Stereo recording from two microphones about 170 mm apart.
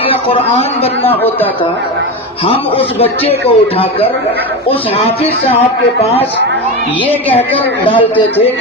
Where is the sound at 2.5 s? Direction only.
35° left (ahead or behind).